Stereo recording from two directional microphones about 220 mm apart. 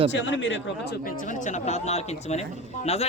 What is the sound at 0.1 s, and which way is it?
Speech, 55° left (ahead or behind).